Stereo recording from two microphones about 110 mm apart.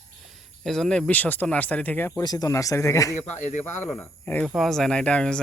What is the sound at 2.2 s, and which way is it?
Speech, 35° left (ahead or behind).